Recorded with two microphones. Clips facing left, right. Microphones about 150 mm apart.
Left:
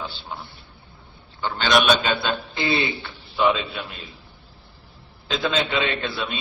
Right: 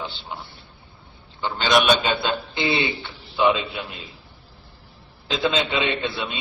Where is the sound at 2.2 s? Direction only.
20° right (ahead or behind).